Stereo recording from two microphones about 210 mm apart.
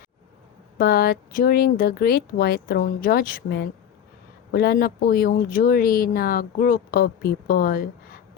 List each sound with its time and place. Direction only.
0.8 s speech: 45° left (ahead or behind)